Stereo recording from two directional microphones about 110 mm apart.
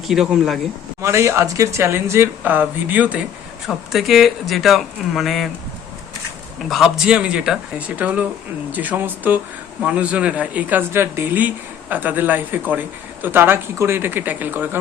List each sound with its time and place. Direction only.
0.1 s speech: 5° right (ahead or behind)
1.0 s speech: 25° right (ahead or behind)
3.7 s speech: centre (ahead or behind)
6.7 s speech: centre (ahead or behind); by 14.8 s 15° right (ahead or behind)